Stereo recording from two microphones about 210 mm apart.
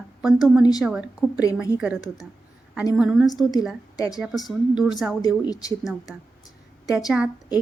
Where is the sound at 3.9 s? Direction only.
15° left (ahead or behind).